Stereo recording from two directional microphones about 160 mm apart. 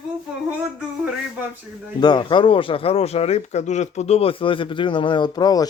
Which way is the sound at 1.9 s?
25° left (ahead or behind).